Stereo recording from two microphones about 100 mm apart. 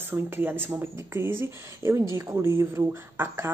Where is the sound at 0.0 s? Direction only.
20° right (ahead or behind).